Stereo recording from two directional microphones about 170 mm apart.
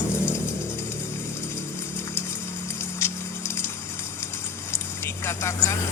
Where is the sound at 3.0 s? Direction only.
15° left (ahead or behind).